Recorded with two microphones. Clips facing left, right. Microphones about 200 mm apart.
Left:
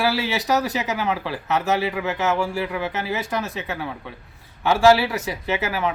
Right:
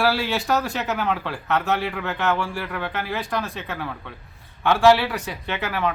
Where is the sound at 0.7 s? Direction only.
Centre (ahead or behind).